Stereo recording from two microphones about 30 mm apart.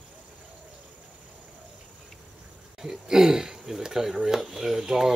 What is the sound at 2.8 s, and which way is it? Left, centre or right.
Speech, centre.